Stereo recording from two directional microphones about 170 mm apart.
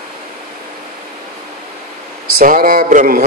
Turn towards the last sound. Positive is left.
turn(degrees=-50)  # may be behind; listen again after turning